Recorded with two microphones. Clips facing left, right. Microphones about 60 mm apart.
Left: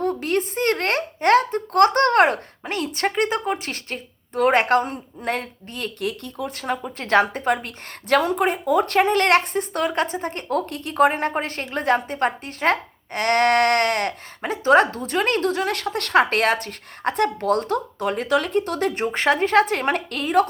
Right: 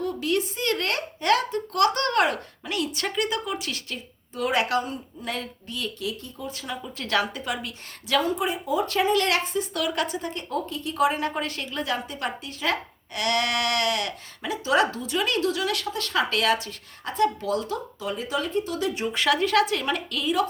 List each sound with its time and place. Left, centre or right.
0.0 s a woman's voice: left
9.7 s a woman's voice: left